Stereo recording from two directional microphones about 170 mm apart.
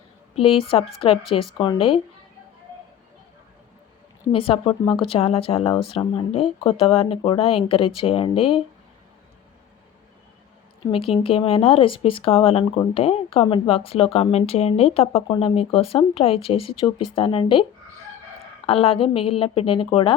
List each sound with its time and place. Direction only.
0.3 s speech: 35° left (ahead or behind)
4.3 s speech: 30° left (ahead or behind)
10.9 s speech: 35° left (ahead or behind)